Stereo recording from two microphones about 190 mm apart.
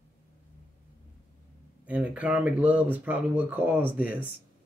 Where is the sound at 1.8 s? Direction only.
5° right (ahead or behind).